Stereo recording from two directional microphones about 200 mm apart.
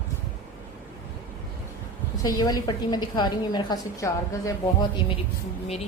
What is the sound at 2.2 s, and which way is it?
A woman's voice, 20° left (ahead or behind).